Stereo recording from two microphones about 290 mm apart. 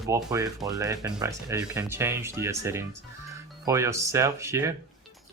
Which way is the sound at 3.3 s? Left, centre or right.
Centre.